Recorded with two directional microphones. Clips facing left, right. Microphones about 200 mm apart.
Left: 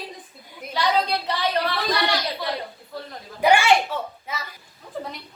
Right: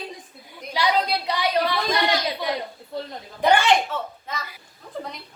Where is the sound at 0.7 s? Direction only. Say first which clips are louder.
Even; 10° right (ahead or behind).